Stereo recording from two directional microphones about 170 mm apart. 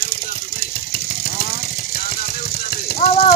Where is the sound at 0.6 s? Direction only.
60° left (ahead or behind).